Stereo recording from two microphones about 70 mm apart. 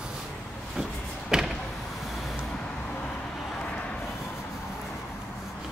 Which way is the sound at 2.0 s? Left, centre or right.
Centre.